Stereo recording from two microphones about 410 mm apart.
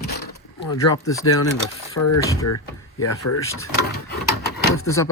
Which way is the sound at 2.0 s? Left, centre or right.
Left.